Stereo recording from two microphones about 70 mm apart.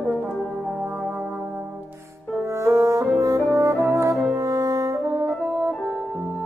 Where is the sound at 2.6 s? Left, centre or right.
Right.